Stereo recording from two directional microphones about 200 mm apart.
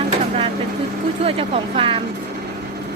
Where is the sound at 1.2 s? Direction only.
25° right (ahead or behind).